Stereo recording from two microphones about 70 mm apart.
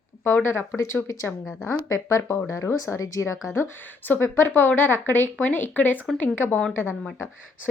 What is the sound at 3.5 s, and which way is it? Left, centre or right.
A woman's voice, left.